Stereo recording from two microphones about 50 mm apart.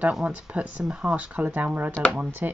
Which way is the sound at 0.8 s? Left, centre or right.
Centre.